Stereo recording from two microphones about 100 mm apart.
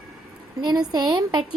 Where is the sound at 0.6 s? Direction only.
45° right (ahead or behind).